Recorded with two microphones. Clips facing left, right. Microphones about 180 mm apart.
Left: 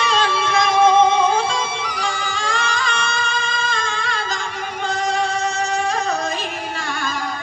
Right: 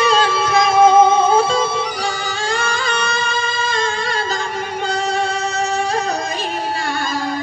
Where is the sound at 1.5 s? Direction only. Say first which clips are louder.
Right 6 dB; 35° right (ahead or behind).